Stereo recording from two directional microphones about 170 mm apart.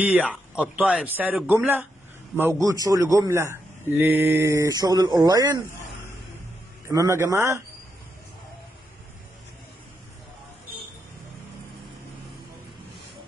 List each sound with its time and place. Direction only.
0.0 s a man's voice: 10° right (ahead or behind); by 5.6 s 25° right (ahead or behind)
6.9 s speech: 15° right (ahead or behind)